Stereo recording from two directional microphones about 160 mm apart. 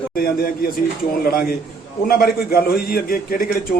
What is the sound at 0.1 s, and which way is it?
A man's voice, 65° left (ahead or behind).